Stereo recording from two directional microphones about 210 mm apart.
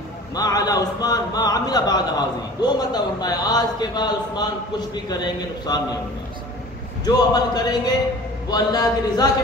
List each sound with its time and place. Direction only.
0.3 s a man's voice: 20° left (ahead or behind)
7.2 s a man's voice: 20° left (ahead or behind)
8.5 s a sound: 20° left (ahead or behind)